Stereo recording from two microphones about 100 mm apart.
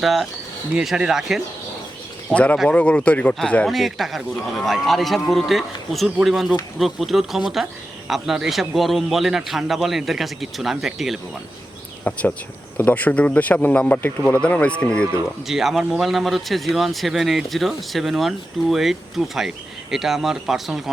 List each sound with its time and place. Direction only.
0.0 s speech: centre (ahead or behind)
2.3 s speech: 10° left (ahead or behind)
12.1 s speech: 15° left (ahead or behind)
15.4 s speech: 5° right (ahead or behind)